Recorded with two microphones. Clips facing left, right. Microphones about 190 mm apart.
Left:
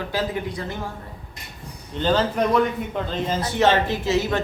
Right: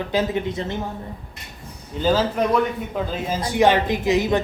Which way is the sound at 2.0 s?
5° right (ahead or behind).